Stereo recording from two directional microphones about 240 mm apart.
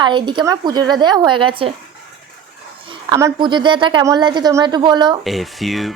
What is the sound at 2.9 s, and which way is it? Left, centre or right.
A woman's voice, centre.